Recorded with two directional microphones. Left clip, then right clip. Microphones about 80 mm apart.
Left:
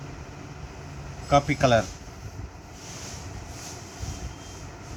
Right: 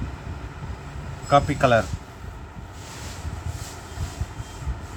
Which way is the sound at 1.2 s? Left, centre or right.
Right.